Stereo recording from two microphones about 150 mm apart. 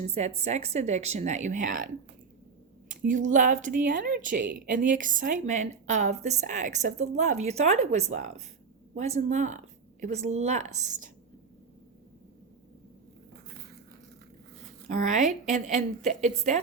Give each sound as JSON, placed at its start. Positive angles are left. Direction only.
{"t": 0.0, "sound": "a woman's voice", "side_deg": -45}
{"t": 2.9, "sound": "a woman's voice", "side_deg": -55}
{"t": 15.0, "sound": "a woman's voice", "side_deg": -55}